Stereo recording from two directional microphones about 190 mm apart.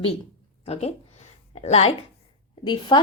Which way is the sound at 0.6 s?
30° left (ahead or behind).